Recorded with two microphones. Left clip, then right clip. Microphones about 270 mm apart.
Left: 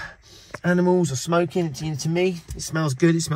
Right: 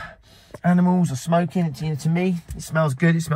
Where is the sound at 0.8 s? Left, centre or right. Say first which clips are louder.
Left 3 dB; left.